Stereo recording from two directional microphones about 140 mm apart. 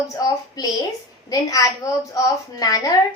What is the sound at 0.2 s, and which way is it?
A woman's voice, 25° left (ahead or behind).